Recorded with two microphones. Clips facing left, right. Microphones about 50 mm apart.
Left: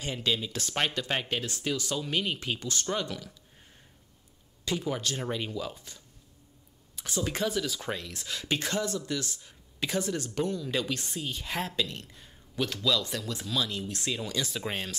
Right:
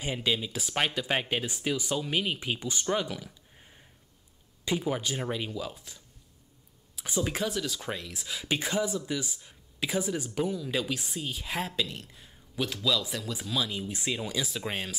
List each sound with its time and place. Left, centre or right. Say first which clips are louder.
0.0 s speech: right 1 dB; centre
4.6 s speech: right 1 dB; centre
5.4 s speech: even; centre
7.1 s speech: right 2 dB; centre
7.3 s speech: left 1 dB; centre